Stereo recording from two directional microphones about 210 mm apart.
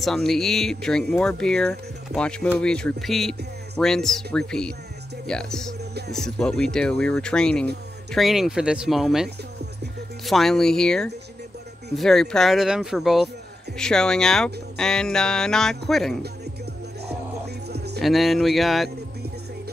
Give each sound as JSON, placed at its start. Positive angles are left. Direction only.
{"t": 0.0, "sound": "speech", "side_deg": 0}
{"t": 17.6, "sound": "music", "side_deg": -50}
{"t": 18.0, "sound": "speech", "side_deg": 0}